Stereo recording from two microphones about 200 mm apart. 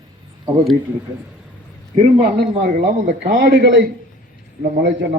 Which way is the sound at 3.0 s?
55° right (ahead or behind).